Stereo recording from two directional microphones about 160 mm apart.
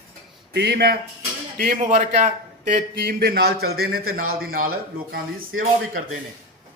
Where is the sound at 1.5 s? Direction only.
60° right (ahead or behind).